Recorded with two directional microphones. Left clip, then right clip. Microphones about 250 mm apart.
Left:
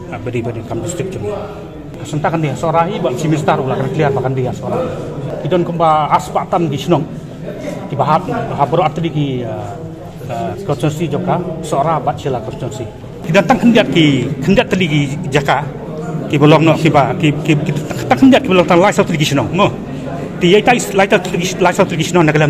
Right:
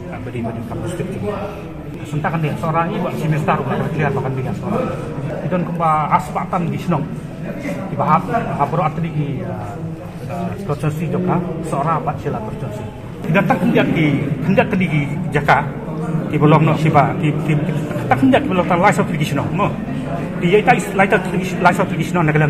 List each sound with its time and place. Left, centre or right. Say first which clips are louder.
2.2 s a man's voice: left 5 dB; left
5.5 s a man's voice: left 5 dB; left
8.0 s a man's voice: left 2 dB; left
10.7 s a man's voice: left 5 dB; left
13.3 s a man's voice: left 5 dB; left